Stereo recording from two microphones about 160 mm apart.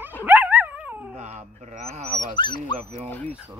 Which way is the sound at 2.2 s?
30° left (ahead or behind).